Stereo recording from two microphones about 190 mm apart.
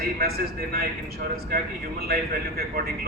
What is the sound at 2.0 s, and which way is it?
Speech, 55° right (ahead or behind).